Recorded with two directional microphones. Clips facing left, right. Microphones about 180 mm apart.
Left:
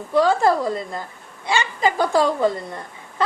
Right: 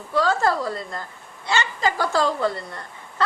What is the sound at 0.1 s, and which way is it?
A woman's voice, 15° left (ahead or behind).